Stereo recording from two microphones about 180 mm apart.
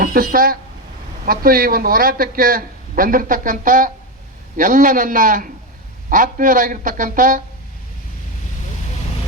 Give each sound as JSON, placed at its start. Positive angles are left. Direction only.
{"t": 0.0, "sound": "a man's voice", "side_deg": -50}